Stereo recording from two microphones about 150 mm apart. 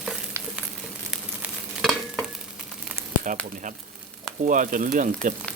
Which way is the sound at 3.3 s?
60° right (ahead or behind).